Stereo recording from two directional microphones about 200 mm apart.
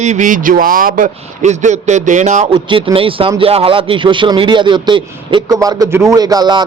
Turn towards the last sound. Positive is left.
turn(degrees=-20)  # may be behind; listen again after turning